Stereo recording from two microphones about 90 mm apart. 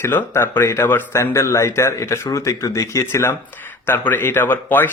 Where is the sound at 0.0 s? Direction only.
25° left (ahead or behind).